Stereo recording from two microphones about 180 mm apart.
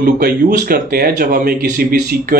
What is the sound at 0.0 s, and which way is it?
Speech, 55° right (ahead or behind).